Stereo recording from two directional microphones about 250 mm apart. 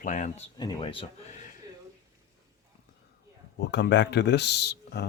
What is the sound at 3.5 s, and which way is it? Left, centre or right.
Speech, left.